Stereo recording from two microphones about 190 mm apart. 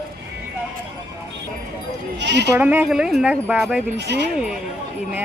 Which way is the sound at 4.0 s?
65° right (ahead or behind).